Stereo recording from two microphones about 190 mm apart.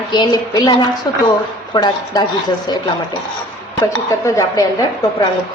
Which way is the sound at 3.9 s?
15° left (ahead or behind).